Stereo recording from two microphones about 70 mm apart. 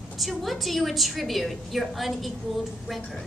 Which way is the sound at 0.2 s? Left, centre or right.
Centre.